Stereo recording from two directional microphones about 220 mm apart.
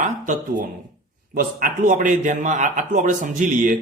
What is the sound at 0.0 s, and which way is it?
A man's voice, 35° right (ahead or behind).